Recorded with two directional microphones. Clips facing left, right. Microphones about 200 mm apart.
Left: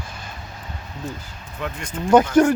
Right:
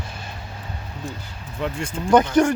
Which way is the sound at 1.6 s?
30° right (ahead or behind).